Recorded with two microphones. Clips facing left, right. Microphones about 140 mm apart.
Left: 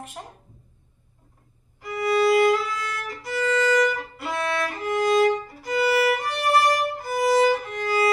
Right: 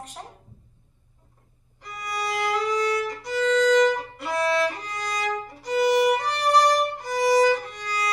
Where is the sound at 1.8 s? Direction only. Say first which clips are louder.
Left 11 dB; 5° left (ahead or behind).